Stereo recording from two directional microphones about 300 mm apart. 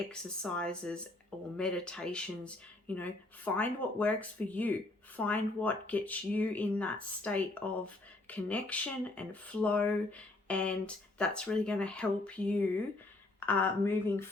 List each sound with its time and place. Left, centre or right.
0.1 s speech: centre